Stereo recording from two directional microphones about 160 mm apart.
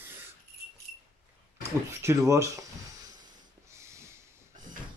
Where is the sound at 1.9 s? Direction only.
20° right (ahead or behind).